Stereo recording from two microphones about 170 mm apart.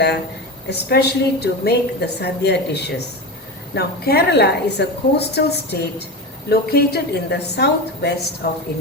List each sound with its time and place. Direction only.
0.7 s a woman's voice: 70° left (ahead or behind)
3.8 s a woman's voice: 65° left (ahead or behind)